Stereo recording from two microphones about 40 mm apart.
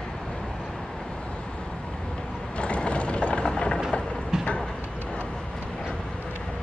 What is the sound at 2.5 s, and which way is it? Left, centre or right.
Mechanisms, left.